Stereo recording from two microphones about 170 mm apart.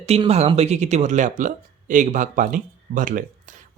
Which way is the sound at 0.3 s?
40° right (ahead or behind).